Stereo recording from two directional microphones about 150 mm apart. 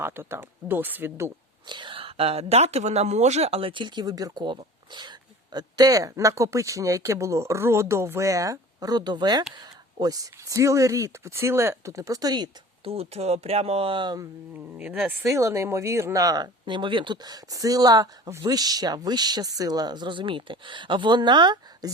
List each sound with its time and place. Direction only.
0.0 s speech: 15° right (ahead or behind)
1.6 s speech: 30° right (ahead or behind)
12.8 s speech: 40° right (ahead or behind)
14.5 s speech: 10° right (ahead or behind); by 21.8 s 30° right (ahead or behind)